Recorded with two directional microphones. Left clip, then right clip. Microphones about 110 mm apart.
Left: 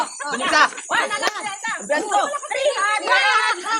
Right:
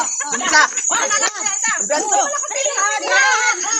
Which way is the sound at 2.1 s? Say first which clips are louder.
Right 1 dB; centre (ahead or behind).